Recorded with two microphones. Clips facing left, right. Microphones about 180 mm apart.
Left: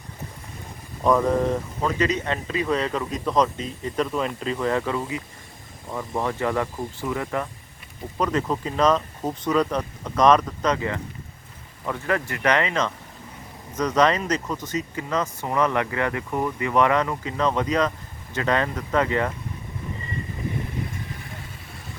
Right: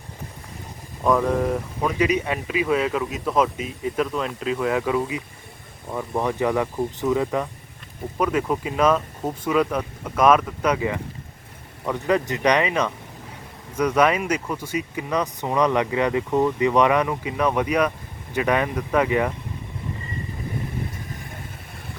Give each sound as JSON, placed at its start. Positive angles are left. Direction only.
{"t": 1.0, "sound": "speech", "side_deg": 0}